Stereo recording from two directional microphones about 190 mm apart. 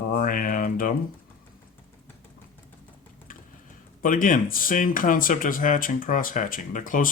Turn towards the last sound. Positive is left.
turn(degrees=45)  # may be behind; listen again after turning